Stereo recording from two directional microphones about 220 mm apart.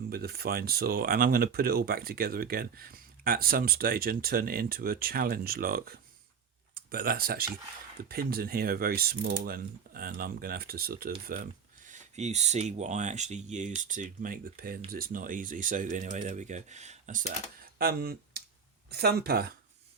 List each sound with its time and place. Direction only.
0.1 s speech: 45° right (ahead or behind)
11.9 s speech: 30° right (ahead or behind)